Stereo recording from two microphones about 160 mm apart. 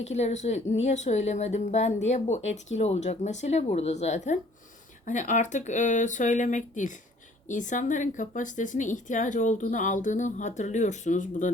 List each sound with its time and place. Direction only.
0.0 s a woman's voice: 45° left (ahead or behind)